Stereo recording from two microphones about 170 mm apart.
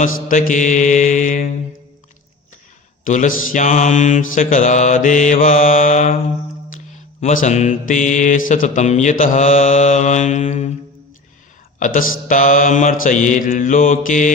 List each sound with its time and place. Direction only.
0.0 s mantra: 50° left (ahead or behind)
3.0 s mantra: 50° left (ahead or behind)
11.8 s mantra: 50° left (ahead or behind)